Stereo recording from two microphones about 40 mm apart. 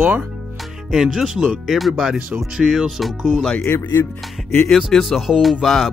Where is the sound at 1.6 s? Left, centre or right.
Centre.